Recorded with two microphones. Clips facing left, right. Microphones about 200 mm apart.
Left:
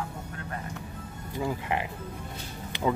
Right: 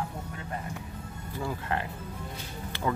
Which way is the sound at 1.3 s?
15° left (ahead or behind).